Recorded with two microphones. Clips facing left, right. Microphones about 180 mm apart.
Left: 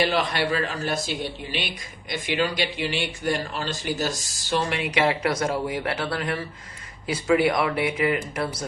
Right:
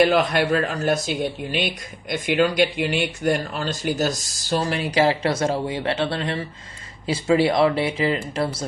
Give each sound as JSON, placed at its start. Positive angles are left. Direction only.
{"t": 0.0, "sound": "speech", "side_deg": -50}